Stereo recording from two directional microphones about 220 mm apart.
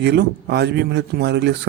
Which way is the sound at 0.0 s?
50° right (ahead or behind).